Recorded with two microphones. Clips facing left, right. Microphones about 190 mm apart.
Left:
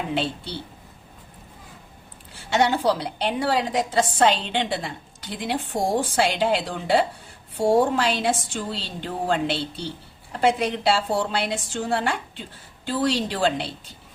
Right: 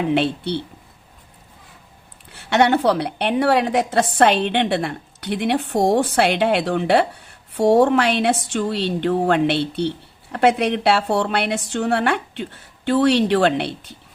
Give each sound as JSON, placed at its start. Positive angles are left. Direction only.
{"t": 0.1, "sound": "a woman's voice", "side_deg": -65}
{"t": 2.3, "sound": "a woman's voice", "side_deg": -65}